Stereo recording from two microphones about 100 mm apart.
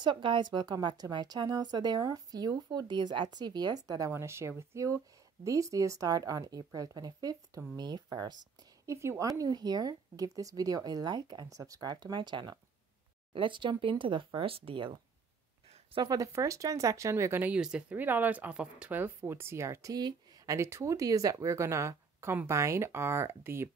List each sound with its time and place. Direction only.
0.0 s a woman's voice: 55° right (ahead or behind)
8.8 s a woman's voice: 30° right (ahead or behind); by 15.0 s 65° right (ahead or behind)
16.0 s a woman's voice: 40° right (ahead or behind); by 17.6 s 20° right (ahead or behind)
17.6 s speech: 10° right (ahead or behind); by 19.9 s 25° right (ahead or behind)
19.9 s speech: 45° right (ahead or behind)
20.4 s speech: 30° right (ahead or behind)